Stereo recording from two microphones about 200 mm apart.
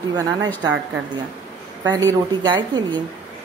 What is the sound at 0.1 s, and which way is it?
Speech, 15° right (ahead or behind).